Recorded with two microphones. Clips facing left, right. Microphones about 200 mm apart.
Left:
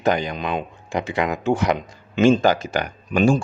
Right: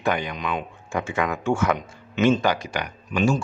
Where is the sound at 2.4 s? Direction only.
45° left (ahead or behind).